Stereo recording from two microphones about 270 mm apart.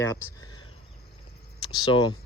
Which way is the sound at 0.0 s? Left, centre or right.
Centre.